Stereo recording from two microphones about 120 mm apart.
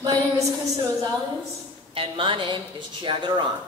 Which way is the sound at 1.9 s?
50° right (ahead or behind).